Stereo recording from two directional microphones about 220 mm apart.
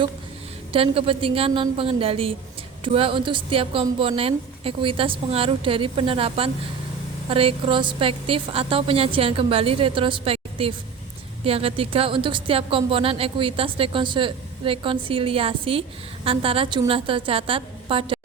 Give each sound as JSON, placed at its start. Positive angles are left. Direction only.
{"t": 0.7, "sound": "a woman's voice", "side_deg": -25}